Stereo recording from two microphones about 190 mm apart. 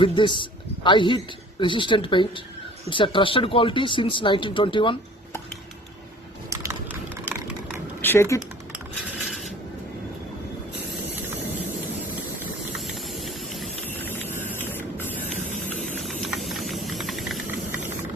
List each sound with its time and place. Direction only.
0.0 s speech: 25° left (ahead or behind)
8.0 s speech: 15° left (ahead or behind)
12.7 s a sound: centre (ahead or behind)
14.0 s spray: 10° left (ahead or behind)
16.0 s vehicle: centre (ahead or behind)